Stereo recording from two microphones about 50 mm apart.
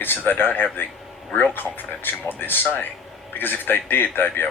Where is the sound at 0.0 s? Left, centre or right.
Left.